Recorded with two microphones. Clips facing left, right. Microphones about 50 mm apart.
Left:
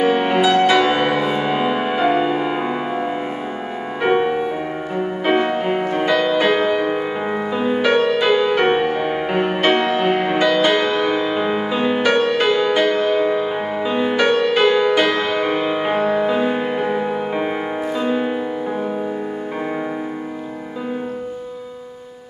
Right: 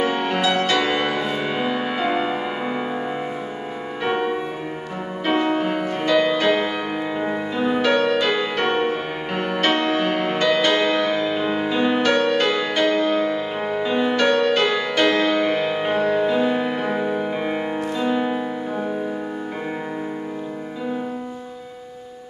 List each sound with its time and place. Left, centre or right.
0.0 s music: centre
4.0 s music: left; by 17.2 s centre
17.4 s music: centre